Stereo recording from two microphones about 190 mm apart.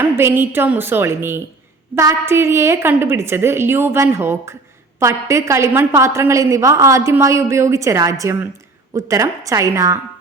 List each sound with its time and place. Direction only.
0.0 s a woman's voice: 10° right (ahead or behind)